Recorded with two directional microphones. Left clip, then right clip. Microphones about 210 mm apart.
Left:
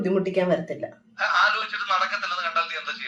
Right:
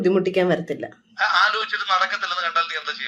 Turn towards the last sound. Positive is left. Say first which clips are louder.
# right 3 dB
turn(degrees=-50)  # may be behind; listen again after turning